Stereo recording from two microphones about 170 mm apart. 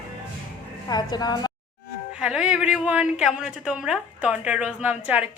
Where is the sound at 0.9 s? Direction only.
25° left (ahead or behind).